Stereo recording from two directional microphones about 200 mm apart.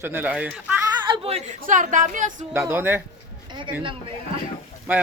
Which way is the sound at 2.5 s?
10° right (ahead or behind).